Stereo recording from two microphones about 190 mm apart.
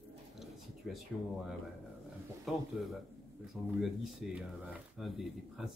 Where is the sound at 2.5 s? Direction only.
Centre (ahead or behind).